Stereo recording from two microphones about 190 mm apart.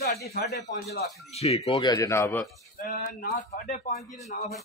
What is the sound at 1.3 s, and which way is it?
Speech, 35° left (ahead or behind).